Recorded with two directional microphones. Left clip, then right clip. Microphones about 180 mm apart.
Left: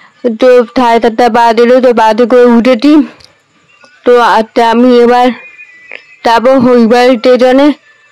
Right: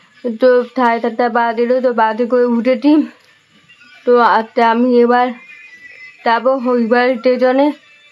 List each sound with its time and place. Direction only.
0.2 s a woman's voice: 40° left (ahead or behind)
0.8 s speech: 50° left (ahead or behind)
4.0 s speech: 45° left (ahead or behind)